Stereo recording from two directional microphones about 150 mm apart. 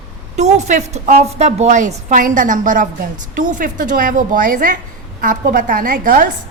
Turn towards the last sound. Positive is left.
turn(degrees=-70)  # may be behind; listen again after turning